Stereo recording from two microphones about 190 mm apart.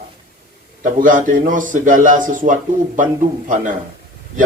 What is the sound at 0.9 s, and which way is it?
A man's voice, 45° right (ahead or behind).